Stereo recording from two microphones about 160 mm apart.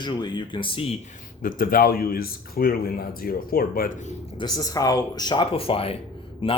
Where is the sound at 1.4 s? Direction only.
60° left (ahead or behind).